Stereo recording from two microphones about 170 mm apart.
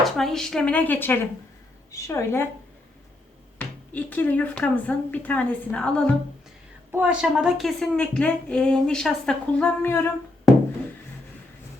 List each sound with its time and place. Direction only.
0.0 s speech: centre (ahead or behind)
3.6 s speech: 10° left (ahead or behind)
6.9 s a woman's voice: 5° right (ahead or behind); by 10.1 s 15° left (ahead or behind)